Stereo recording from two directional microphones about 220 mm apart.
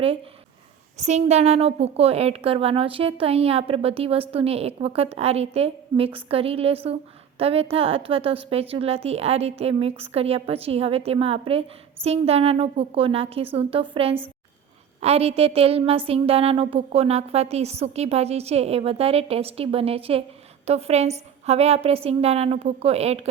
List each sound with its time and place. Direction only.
0.9 s a woman's voice: 30° right (ahead or behind)